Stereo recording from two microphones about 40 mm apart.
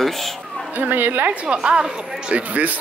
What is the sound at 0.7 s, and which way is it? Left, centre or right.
Speech, right.